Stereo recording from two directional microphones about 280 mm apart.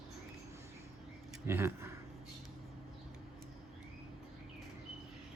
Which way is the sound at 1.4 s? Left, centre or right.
Centre.